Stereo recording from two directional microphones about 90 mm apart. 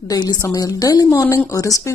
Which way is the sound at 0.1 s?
50° left (ahead or behind).